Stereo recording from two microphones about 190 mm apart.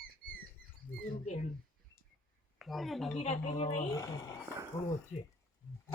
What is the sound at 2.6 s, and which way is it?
Speech, centre (ahead or behind).